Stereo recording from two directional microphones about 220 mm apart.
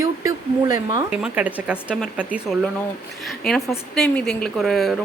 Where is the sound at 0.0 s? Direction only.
15° right (ahead or behind).